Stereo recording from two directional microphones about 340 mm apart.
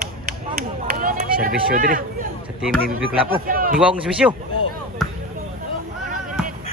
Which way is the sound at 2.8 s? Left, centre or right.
Right.